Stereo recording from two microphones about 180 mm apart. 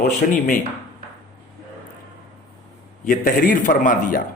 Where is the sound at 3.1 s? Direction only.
50° left (ahead or behind).